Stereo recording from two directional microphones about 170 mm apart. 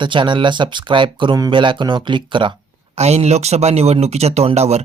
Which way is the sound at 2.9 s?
40° right (ahead or behind).